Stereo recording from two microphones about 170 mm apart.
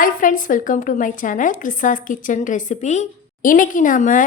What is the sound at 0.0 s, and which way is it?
A woman's voice, 55° left (ahead or behind).